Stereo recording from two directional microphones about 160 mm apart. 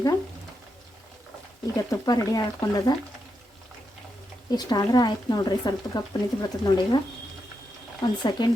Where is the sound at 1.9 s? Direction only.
20° left (ahead or behind).